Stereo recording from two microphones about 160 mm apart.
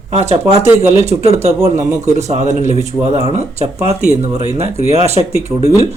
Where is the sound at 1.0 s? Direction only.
40° right (ahead or behind).